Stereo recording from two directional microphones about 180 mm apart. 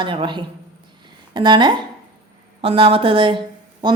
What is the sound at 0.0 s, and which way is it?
A woman's voice, 25° right (ahead or behind).